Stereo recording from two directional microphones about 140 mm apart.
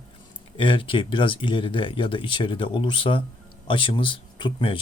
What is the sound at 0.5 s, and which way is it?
Speech, 35° left (ahead or behind).